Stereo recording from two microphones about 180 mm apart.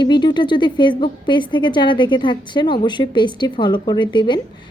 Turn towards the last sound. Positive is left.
turn(degrees=25)  # may be behind; listen again after turning